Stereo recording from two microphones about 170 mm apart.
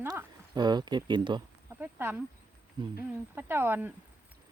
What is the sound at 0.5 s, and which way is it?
Speech, 25° right (ahead or behind).